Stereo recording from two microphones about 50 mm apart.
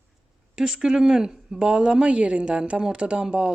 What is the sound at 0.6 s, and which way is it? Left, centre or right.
A woman's voice, centre.